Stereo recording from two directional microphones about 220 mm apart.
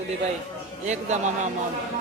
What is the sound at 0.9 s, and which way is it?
Speech, 30° right (ahead or behind).